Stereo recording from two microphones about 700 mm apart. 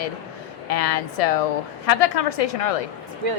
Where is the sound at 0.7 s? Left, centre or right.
Left.